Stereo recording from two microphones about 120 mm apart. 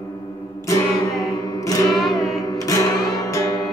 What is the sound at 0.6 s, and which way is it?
Music, 25° left (ahead or behind).